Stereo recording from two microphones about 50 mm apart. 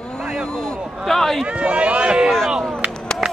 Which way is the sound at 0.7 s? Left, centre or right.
Centre.